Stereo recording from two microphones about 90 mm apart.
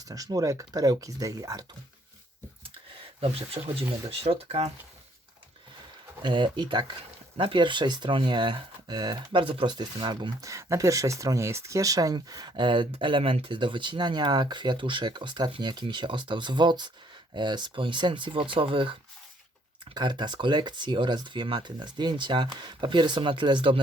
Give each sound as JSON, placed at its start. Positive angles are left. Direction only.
{"t": 0.0, "sound": "speech", "side_deg": -40}
{"t": 3.2, "sound": "speech", "side_deg": -90}
{"t": 6.2, "sound": "speech", "side_deg": -60}
{"t": 7.3, "sound": "speech", "side_deg": -75}
{"t": 9.4, "sound": "speech", "side_deg": -75}
{"t": 10.4, "sound": "speech", "side_deg": -35}
{"t": 19.8, "sound": "speech", "side_deg": -55}